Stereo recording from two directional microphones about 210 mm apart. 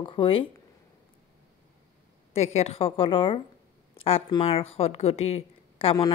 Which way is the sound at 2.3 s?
30° left (ahead or behind).